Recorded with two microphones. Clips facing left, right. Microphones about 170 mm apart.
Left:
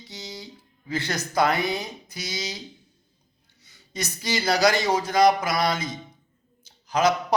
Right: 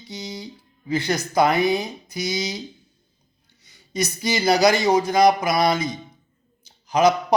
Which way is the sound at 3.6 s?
15° right (ahead or behind).